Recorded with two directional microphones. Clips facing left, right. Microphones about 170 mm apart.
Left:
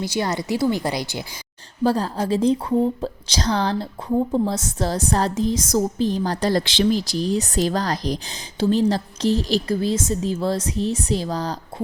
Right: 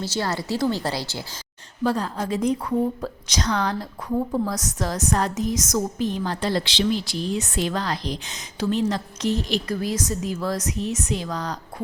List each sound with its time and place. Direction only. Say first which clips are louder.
0.0 s a woman's voice: left 3 dB; 15° left (ahead or behind)
1.8 s a woman's voice: left 3 dB; 30° left (ahead or behind)